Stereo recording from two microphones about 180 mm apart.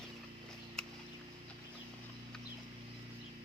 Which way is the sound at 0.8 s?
5° left (ahead or behind).